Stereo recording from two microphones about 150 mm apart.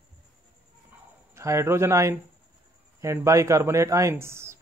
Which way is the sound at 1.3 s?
20° right (ahead or behind).